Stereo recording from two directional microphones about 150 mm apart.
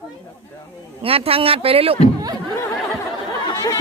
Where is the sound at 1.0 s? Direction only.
40° right (ahead or behind).